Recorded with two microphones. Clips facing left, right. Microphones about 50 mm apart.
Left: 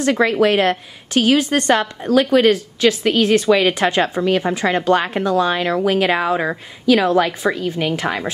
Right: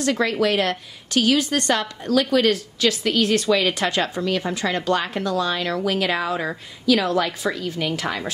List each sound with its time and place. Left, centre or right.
0.0 s speech: left